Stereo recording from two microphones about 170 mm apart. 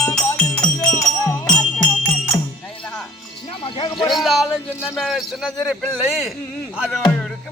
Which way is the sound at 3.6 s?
25° left (ahead or behind).